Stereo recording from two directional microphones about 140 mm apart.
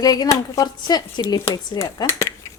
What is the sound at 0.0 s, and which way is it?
Speech, 30° left (ahead or behind).